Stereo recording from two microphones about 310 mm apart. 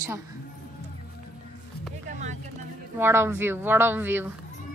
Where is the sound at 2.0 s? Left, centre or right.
Right.